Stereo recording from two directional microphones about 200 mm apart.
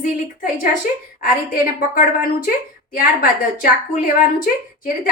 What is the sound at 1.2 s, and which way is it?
A woman's voice, 45° left (ahead or behind).